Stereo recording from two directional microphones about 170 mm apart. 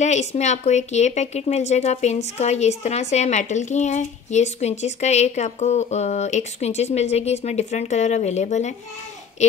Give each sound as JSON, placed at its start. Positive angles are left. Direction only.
{"t": 0.0, "sound": "speech", "side_deg": 40}